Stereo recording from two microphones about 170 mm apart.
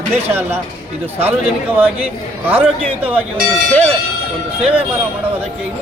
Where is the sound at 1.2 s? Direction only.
10° right (ahead or behind).